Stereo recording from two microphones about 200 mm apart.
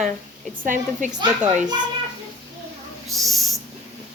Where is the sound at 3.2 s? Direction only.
Centre (ahead or behind).